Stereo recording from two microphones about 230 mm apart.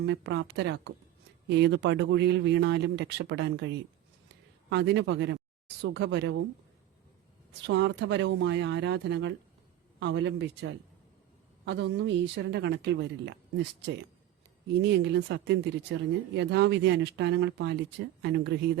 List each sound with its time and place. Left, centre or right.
0.0 s speech: right
7.7 s speech: right